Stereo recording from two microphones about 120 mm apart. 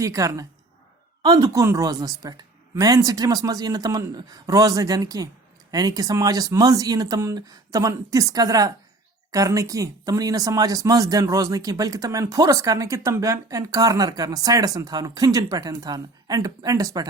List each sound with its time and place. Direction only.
0.0 s speech: 25° right (ahead or behind)